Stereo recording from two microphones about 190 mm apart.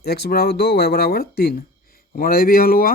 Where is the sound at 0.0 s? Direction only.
55° left (ahead or behind).